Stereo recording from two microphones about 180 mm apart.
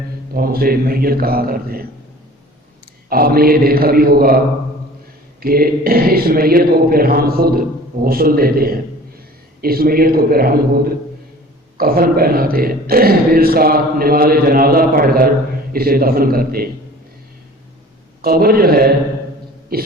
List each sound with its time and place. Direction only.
0.3 s a man's voice: 55° right (ahead or behind)
3.1 s a man's voice: 55° right (ahead or behind)
5.4 s a man's voice: 55° right (ahead or behind)
18.2 s a man's voice: 60° right (ahead or behind)